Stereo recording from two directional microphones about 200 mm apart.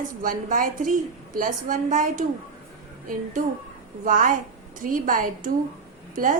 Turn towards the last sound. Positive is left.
turn(degrees=-40)  # may be behind; listen again after turning